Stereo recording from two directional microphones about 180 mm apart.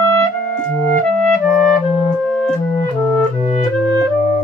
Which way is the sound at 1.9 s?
35° left (ahead or behind).